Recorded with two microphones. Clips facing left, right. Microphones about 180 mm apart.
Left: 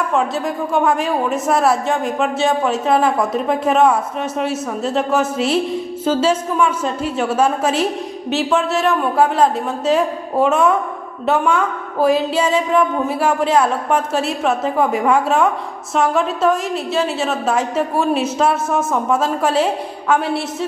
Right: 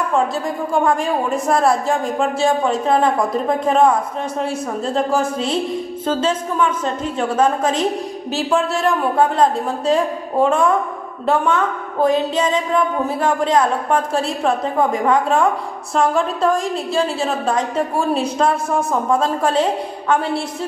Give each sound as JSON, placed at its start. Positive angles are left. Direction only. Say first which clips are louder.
{"t": 0.7, "sound": "a woman's voice", "louder": "even", "side_deg": 5}
{"t": 6.0, "sound": "a woman's voice", "louder": "left 3 dB", "side_deg": 10}